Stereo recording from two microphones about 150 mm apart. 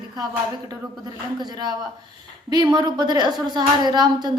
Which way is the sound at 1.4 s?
25° right (ahead or behind).